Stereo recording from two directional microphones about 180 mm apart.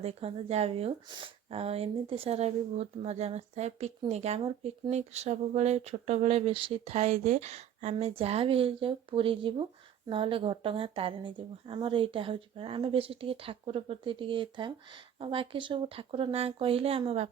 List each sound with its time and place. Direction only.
0.0 s speech: 35° right (ahead or behind)